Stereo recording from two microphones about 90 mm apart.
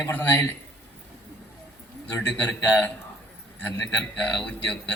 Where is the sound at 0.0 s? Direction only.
25° left (ahead or behind).